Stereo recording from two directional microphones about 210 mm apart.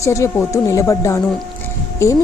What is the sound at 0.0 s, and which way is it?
Speech, 15° left (ahead or behind).